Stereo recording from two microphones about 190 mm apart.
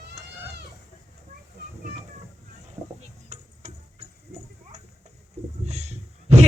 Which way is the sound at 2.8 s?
15° right (ahead or behind).